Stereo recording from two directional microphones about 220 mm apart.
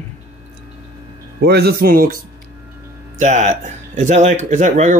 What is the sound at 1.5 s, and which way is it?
Speech, 45° right (ahead or behind).